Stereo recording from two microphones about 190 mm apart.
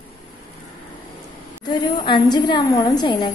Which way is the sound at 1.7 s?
20° left (ahead or behind).